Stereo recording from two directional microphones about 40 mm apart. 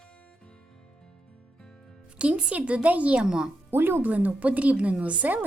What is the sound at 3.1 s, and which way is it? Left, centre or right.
Speech, right.